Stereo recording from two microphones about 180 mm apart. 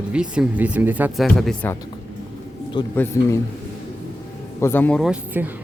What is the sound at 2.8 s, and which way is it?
Speech, 25° left (ahead or behind).